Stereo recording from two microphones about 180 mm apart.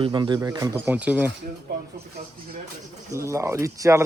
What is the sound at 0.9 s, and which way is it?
Speech, 10° right (ahead or behind).